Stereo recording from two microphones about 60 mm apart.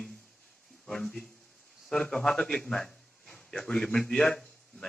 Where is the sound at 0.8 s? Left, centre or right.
Centre.